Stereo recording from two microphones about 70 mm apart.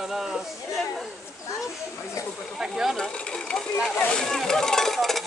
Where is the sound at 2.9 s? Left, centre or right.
Centre.